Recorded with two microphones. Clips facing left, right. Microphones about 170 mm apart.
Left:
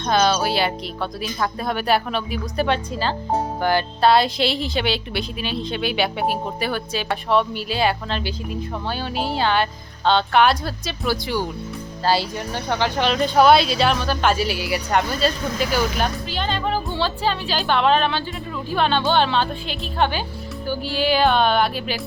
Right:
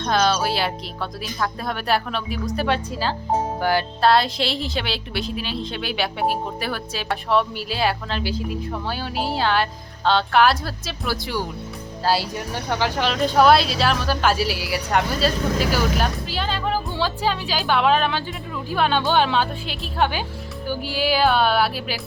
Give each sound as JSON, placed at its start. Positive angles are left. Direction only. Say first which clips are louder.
{"t": 0.0, "sound": "speech", "louder": "left 1 dB", "side_deg": 0}